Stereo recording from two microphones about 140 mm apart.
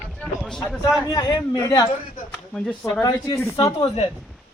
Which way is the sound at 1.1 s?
25° left (ahead or behind).